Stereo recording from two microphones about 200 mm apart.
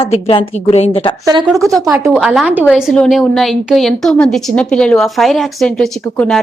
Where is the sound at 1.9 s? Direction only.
15° right (ahead or behind).